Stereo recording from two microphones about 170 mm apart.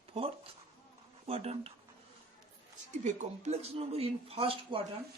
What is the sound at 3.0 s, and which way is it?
Speech, 40° right (ahead or behind).